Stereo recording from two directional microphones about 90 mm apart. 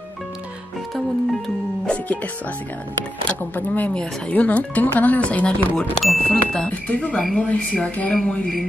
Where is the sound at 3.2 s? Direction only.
20° left (ahead or behind).